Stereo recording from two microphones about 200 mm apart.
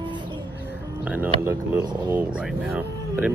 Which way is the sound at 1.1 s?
10° right (ahead or behind).